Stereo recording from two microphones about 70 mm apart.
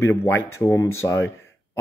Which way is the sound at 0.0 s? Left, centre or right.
Left.